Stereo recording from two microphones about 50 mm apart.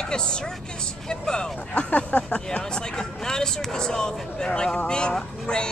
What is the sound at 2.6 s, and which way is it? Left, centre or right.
Speech, centre.